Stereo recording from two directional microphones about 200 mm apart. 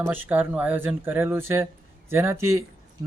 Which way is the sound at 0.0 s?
10° right (ahead or behind).